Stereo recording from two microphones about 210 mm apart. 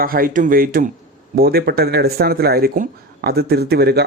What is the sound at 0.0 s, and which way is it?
Speech, 45° right (ahead or behind).